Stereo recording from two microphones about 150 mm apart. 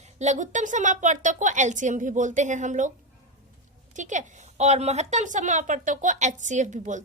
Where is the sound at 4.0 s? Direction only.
55° right (ahead or behind).